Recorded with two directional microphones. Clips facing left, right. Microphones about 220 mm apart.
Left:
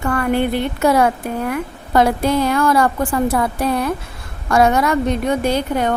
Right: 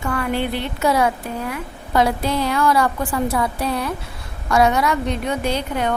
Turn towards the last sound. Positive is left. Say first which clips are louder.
# left 4 dB
turn(degrees=45)  # may be behind; listen again after turning